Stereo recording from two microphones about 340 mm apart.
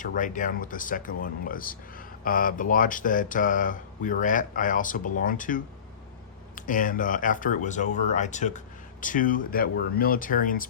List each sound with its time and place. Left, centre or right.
0.0 s speech: left